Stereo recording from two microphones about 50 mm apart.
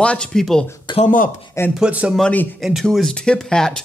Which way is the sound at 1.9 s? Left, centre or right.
Right.